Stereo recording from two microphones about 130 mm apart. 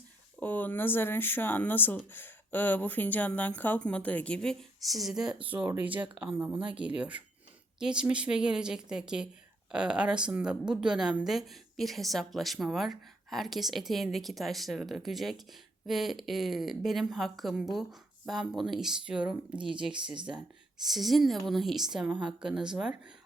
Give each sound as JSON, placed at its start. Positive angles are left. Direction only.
{"t": 0.3, "sound": "a woman's voice", "side_deg": 15}
{"t": 20.1, "sound": "speech", "side_deg": -35}
{"t": 20.8, "sound": "a woman's voice", "side_deg": 0}